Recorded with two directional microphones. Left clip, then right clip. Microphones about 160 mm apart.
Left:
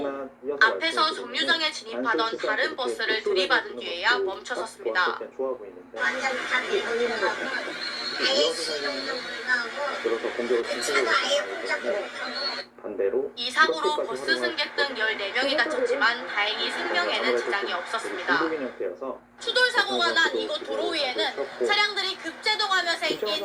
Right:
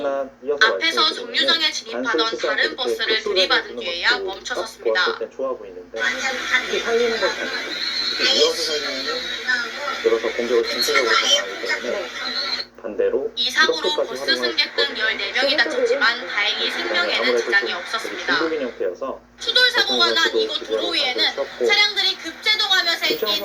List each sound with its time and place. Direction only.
0.6 s a woman's voice: 15° right (ahead or behind)